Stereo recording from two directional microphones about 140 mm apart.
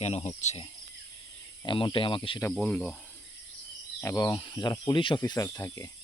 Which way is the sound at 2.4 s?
10° left (ahead or behind).